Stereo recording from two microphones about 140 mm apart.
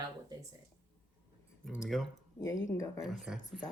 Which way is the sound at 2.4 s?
20° left (ahead or behind).